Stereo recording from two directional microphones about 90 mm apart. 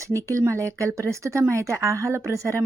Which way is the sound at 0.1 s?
35° right (ahead or behind).